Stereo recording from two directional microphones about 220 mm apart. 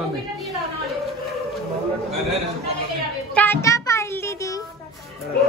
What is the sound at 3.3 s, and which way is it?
Music, 10° left (ahead or behind).